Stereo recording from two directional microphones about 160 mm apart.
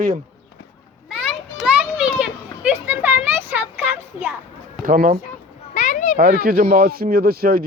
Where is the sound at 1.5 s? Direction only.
5° right (ahead or behind).